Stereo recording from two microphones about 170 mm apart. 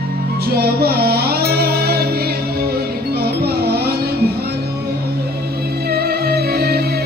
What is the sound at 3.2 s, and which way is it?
Music, 65° right (ahead or behind).